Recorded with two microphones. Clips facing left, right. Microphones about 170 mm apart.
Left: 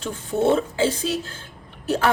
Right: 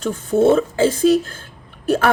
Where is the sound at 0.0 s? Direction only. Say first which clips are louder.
Right 6 dB; 45° right (ahead or behind).